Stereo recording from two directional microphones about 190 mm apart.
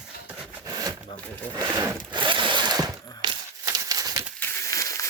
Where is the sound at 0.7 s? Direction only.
20° right (ahead or behind).